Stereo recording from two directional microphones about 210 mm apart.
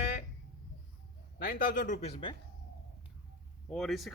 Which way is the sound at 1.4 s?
45° left (ahead or behind).